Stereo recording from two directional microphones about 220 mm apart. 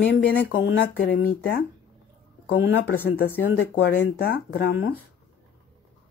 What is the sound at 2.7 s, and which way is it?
Speech, 45° left (ahead or behind).